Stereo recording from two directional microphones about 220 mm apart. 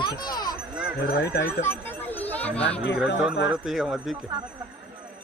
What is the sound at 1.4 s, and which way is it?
Speech, 10° left (ahead or behind).